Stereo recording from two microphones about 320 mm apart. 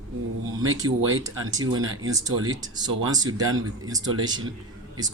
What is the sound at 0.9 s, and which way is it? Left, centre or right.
Speech, right.